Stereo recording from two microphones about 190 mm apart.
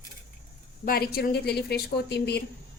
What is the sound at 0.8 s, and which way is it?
A woman's voice, 50° left (ahead or behind).